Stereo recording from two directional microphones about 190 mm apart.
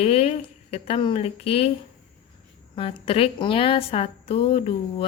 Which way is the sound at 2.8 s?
30° left (ahead or behind).